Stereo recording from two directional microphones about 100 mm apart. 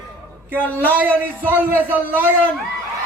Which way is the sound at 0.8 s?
20° right (ahead or behind).